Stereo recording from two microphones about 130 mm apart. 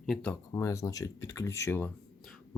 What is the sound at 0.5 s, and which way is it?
Speech, 25° left (ahead or behind).